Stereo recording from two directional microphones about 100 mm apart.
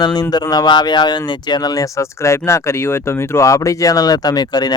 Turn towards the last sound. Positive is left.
turn(degrees=45)  # may be behind; listen again after turning